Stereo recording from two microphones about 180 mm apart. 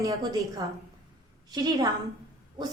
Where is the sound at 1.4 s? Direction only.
20° right (ahead or behind).